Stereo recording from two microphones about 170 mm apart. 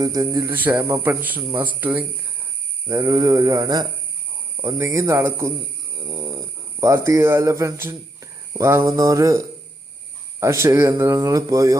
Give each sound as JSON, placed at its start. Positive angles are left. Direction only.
{"t": 0.0, "sound": "a man's voice", "side_deg": -20}
{"t": 10.4, "sound": "a man's voice", "side_deg": -20}